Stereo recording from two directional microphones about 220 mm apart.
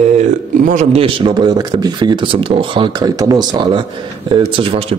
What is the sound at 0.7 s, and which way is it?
Speech, 30° right (ahead or behind).